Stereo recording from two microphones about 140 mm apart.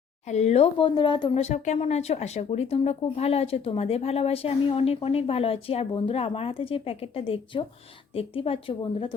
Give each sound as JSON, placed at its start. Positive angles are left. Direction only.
{"t": 0.3, "sound": "speech", "side_deg": 55}
{"t": 1.4, "sound": "speech", "side_deg": 55}